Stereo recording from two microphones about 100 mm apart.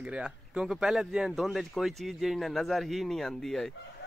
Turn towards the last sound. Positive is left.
turn(degrees=5)  # may be behind; listen again after turning